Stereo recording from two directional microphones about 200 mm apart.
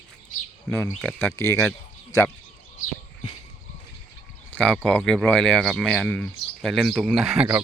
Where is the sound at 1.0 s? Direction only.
5° left (ahead or behind).